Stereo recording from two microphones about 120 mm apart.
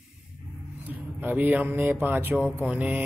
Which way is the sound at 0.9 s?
15° right (ahead or behind).